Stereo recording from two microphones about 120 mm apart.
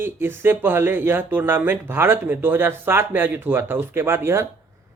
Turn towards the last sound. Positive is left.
turn(degrees=-20)  # may be behind; listen again after turning